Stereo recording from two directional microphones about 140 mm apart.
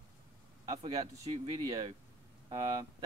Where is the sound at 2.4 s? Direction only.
30° right (ahead or behind).